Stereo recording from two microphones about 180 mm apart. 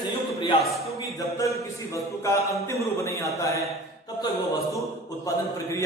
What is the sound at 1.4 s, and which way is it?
A man's voice, 15° left (ahead or behind).